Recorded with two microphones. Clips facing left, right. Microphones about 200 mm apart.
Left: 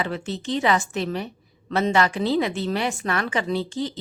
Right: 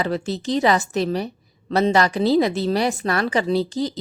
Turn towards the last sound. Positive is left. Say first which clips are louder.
# right 4 dB
turn(degrees=-40)  # may be behind; listen again after turning